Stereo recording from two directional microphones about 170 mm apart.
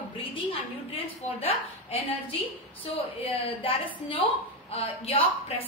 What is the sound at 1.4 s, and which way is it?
A woman's voice, 35° left (ahead or behind).